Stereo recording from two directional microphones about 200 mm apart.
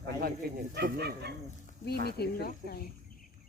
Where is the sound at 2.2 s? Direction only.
50° left (ahead or behind).